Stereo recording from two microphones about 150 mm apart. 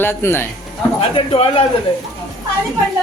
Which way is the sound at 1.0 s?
40° left (ahead or behind).